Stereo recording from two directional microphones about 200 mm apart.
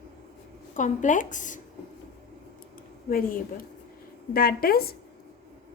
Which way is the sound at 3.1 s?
45° left (ahead or behind).